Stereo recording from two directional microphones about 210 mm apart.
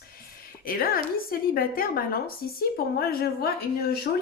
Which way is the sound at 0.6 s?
45° left (ahead or behind).